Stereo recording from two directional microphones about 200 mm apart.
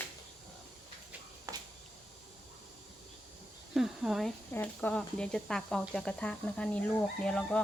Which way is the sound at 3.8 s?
Centre (ahead or behind).